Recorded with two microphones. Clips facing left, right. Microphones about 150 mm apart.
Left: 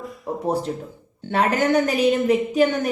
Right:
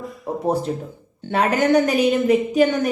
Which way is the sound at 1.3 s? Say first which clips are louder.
Right 2 dB; 20° right (ahead or behind).